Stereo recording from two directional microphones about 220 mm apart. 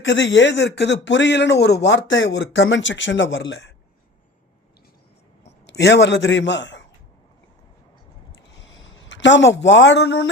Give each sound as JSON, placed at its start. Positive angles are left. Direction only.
{"t": 0.0, "sound": "speech", "side_deg": 55}
{"t": 5.6, "sound": "a man's voice", "side_deg": 50}
{"t": 8.6, "sound": "speech", "side_deg": 55}